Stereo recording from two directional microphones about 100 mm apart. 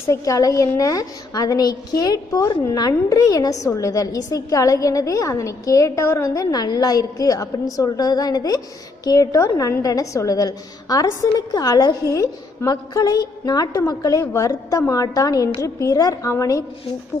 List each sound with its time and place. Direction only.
0.0 s a woman's voice: 30° left (ahead or behind)